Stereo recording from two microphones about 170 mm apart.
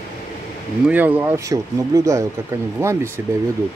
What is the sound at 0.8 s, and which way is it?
Speech, 10° right (ahead or behind).